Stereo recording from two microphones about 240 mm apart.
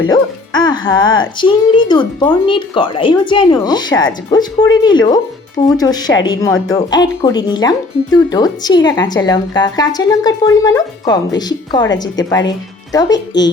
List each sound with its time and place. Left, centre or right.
0.1 s speech: centre